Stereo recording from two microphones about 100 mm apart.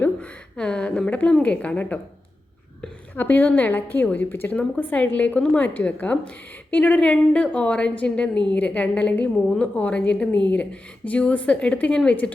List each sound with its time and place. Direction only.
0.0 s a woman's voice: 10° left (ahead or behind)
3.2 s a woman's voice: 20° left (ahead or behind)